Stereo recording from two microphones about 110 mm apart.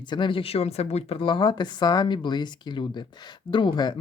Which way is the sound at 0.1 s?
50° left (ahead or behind).